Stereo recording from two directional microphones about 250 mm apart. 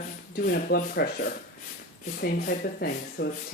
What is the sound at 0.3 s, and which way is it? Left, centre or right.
Speech, left.